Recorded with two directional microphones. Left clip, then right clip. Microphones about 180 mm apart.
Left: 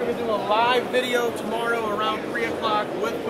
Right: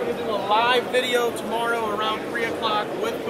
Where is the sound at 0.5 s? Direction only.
20° right (ahead or behind).